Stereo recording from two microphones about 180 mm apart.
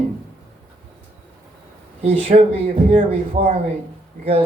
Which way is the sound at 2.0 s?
35° right (ahead or behind).